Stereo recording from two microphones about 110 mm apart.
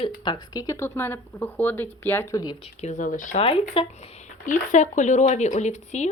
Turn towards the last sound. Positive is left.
turn(degrees=90)